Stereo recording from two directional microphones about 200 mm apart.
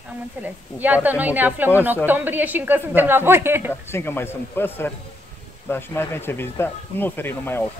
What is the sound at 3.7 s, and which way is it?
Speech, 10° left (ahead or behind).